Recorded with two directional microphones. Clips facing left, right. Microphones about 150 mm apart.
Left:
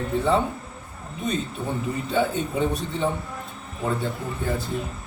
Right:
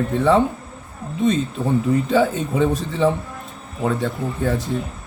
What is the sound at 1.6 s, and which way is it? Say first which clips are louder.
Speech: right 9 dB; 90° right.